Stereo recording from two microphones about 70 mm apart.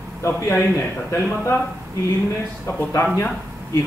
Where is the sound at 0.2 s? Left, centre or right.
Left.